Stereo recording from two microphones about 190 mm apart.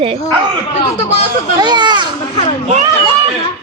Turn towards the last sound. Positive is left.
turn(degrees=-35)  # may be behind; listen again after turning